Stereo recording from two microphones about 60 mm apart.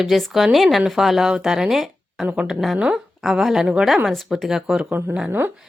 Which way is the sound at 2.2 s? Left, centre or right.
Right.